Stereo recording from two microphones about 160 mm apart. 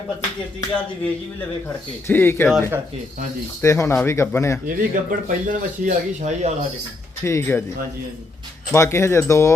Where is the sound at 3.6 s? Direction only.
20° left (ahead or behind).